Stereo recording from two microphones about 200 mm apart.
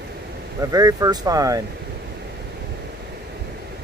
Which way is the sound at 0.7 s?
20° right (ahead or behind).